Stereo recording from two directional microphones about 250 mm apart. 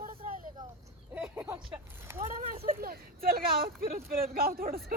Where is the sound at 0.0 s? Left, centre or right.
Right.